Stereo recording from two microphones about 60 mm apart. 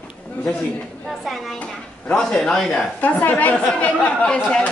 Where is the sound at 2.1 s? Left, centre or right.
Centre.